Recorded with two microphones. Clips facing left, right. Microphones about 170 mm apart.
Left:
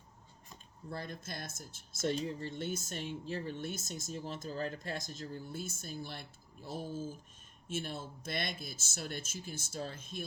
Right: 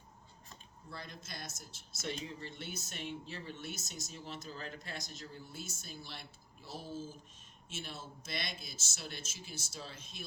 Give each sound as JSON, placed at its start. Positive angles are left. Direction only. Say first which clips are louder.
{"t": 0.9, "sound": "speech", "louder": "left 6 dB", "side_deg": 50}